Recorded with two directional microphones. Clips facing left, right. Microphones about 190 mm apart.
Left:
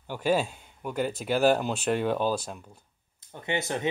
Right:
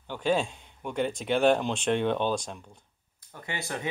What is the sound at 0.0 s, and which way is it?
Speech, 10° left (ahead or behind).